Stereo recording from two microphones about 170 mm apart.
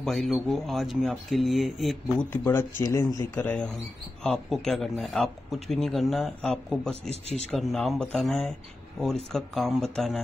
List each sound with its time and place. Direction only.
0.0 s speech: centre (ahead or behind)
2.3 s speech: 15° left (ahead or behind)